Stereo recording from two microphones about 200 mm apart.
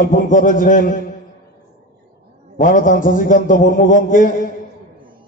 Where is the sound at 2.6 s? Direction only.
40° left (ahead or behind).